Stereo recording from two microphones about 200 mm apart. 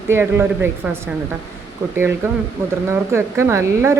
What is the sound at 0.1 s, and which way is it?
A woman's voice, 10° right (ahead or behind).